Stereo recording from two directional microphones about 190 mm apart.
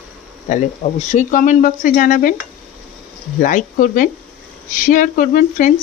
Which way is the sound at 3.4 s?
45° left (ahead or behind).